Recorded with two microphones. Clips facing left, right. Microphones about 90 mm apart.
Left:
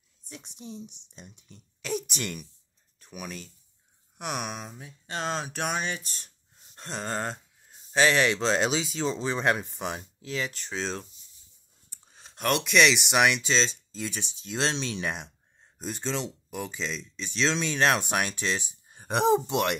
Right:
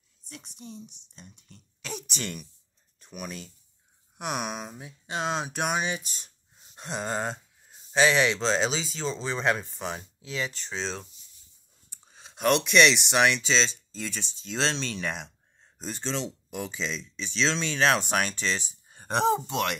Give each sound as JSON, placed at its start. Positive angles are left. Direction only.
{"t": 1.2, "sound": "speech", "side_deg": 10}